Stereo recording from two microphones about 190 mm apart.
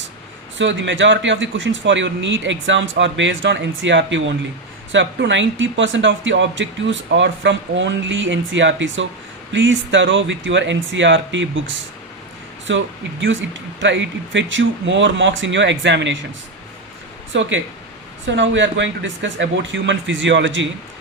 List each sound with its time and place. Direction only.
0.6 s speech: 70° right (ahead or behind)
17.3 s speech: 75° right (ahead or behind)